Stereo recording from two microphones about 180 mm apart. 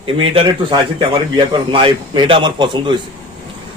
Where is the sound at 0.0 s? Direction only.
30° right (ahead or behind).